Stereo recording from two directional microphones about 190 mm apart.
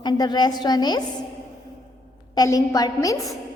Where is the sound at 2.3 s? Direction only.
20° left (ahead or behind).